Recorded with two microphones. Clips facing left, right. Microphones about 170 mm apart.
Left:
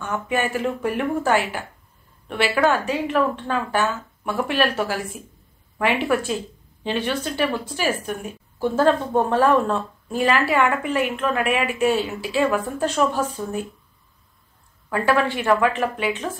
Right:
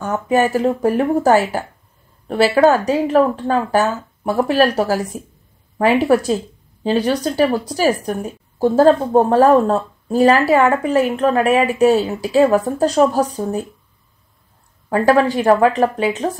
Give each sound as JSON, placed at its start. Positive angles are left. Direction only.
{"t": 0.0, "sound": "speech", "side_deg": -40}
{"t": 14.9, "sound": "speech", "side_deg": -40}